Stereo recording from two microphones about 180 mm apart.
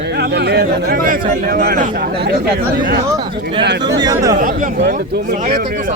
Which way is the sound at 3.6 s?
70° right (ahead or behind).